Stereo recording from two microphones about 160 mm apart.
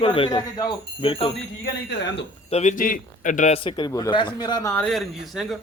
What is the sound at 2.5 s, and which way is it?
A man's voice, 45° left (ahead or behind).